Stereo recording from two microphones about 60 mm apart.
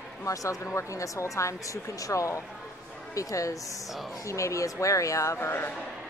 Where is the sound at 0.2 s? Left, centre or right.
Left.